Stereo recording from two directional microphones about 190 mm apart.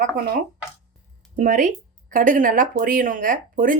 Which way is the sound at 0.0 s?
45° right (ahead or behind).